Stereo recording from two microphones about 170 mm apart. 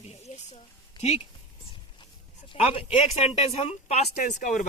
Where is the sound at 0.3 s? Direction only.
45° left (ahead or behind).